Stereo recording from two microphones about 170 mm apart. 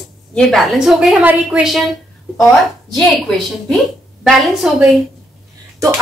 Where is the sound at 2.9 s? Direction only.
Centre (ahead or behind).